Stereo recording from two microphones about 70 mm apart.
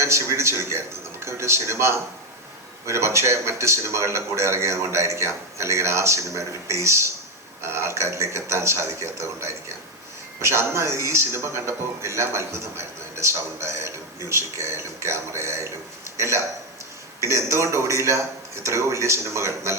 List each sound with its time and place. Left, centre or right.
0.0 s speech: right